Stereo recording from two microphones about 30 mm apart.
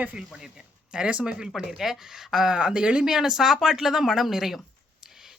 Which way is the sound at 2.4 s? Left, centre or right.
Right.